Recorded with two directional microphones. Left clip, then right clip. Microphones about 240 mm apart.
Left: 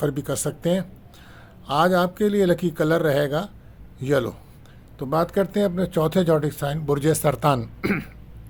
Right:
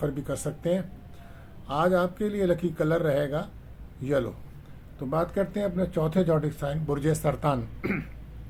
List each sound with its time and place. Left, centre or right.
0.0 s speech: left